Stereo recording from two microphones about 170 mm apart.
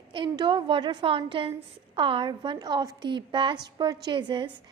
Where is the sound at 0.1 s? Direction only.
30° right (ahead or behind).